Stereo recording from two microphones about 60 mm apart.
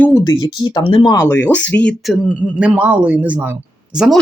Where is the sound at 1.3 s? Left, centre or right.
Left.